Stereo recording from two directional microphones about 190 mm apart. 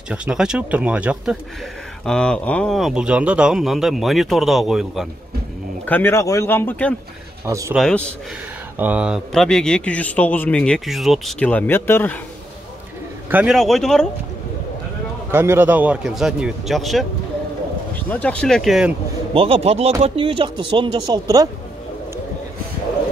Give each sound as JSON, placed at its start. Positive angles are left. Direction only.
{"t": 0.1, "sound": "a man's voice", "side_deg": -5}
{"t": 5.9, "sound": "speech", "side_deg": 10}
{"t": 7.4, "sound": "speech", "side_deg": -15}
{"t": 7.7, "sound": "a man's voice", "side_deg": 5}
{"t": 8.7, "sound": "a man's voice", "side_deg": -10}
{"t": 13.3, "sound": "a man's voice", "side_deg": -5}
{"t": 15.3, "sound": "a man's voice", "side_deg": -10}
{"t": 18.0, "sound": "a man's voice", "side_deg": 10}
{"t": 19.3, "sound": "speech", "side_deg": -30}